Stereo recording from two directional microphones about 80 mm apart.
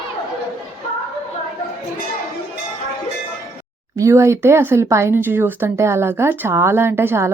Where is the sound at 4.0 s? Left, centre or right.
Right.